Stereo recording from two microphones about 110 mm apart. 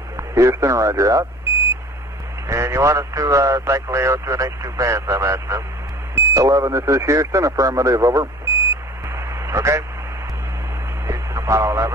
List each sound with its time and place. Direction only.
0.3 s speech: 25° right (ahead or behind)
2.4 s speech: 25° right (ahead or behind)
9.1 s radio: 25° right (ahead or behind)
11.1 s radio: 30° right (ahead or behind)